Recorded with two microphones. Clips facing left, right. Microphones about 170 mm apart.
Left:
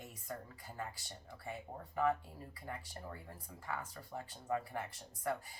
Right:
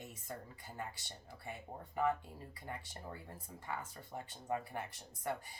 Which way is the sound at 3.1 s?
25° right (ahead or behind).